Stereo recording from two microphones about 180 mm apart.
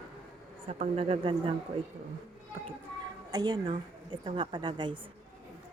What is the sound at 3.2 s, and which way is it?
A woman's voice, 20° right (ahead or behind).